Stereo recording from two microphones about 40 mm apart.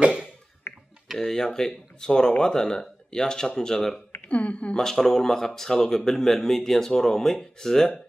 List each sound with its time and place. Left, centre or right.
0.0 s a sound: right
1.2 s speech: centre
4.3 s speech: left
4.7 s speech: centre